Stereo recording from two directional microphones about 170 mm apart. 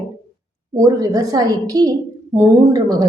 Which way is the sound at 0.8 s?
20° right (ahead or behind).